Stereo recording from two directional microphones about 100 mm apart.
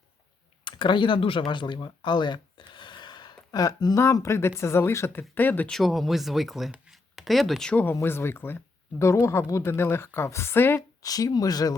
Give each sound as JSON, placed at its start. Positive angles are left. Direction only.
{"t": 0.6, "sound": "speech", "side_deg": 55}
{"t": 5.7, "sound": "speech", "side_deg": 0}
{"t": 7.7, "sound": "speech", "side_deg": 15}
{"t": 11.0, "sound": "speech", "side_deg": 40}